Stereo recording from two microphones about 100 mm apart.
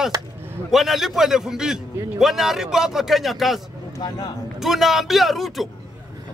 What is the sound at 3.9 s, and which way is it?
Speech, 40° left (ahead or behind).